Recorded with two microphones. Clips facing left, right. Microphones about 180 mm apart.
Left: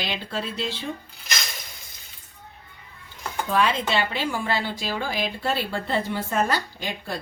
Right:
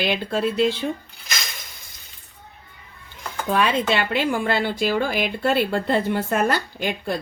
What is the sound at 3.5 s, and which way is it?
Speech, 60° right (ahead or behind).